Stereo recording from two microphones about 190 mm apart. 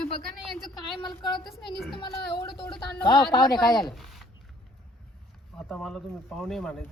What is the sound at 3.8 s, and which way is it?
Speech, centre (ahead or behind).